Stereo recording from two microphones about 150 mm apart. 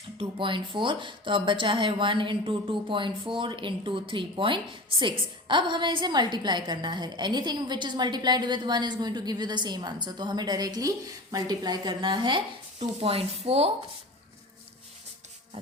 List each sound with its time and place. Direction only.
0.2 s a woman's voice: 35° right (ahead or behind)